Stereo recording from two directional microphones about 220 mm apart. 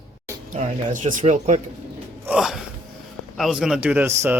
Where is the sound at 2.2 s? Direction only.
5° right (ahead or behind).